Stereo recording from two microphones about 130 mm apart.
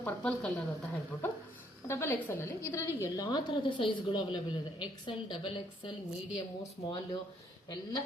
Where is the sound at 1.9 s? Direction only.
20° left (ahead or behind); by 4.2 s 40° left (ahead or behind).